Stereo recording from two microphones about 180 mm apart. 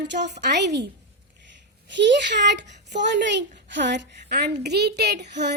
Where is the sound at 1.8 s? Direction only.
80° right.